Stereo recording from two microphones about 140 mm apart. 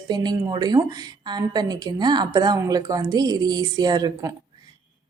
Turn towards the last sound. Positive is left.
turn(degrees=-25)  # may be behind; listen again after turning